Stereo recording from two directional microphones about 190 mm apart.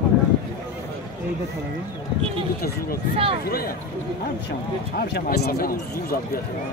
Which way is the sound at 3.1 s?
30° right (ahead or behind).